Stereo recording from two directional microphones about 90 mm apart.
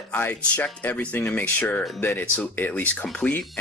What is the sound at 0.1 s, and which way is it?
Speech, 20° left (ahead or behind).